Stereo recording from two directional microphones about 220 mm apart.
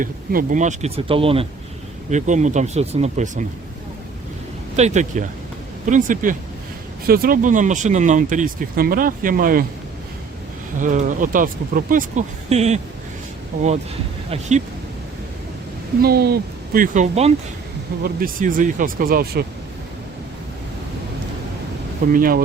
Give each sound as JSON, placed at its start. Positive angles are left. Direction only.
{"t": 0.0, "sound": "speech", "side_deg": -40}
{"t": 4.8, "sound": "speech", "side_deg": -35}
{"t": 10.8, "sound": "speech", "side_deg": -35}
{"t": 16.0, "sound": "speech", "side_deg": -45}
{"t": 22.0, "sound": "speech", "side_deg": -40}